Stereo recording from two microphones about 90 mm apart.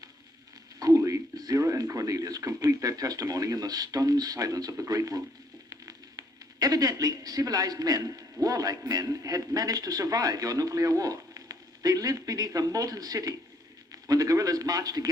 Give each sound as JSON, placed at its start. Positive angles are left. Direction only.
{"t": 0.8, "sound": "a man's voice", "side_deg": -40}